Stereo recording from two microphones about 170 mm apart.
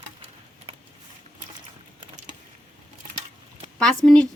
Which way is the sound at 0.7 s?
35° right (ahead or behind).